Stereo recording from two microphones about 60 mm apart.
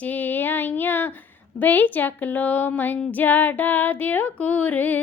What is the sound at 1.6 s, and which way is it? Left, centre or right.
A woman's voice, left.